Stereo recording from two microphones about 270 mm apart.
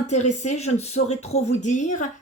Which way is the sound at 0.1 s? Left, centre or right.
Left.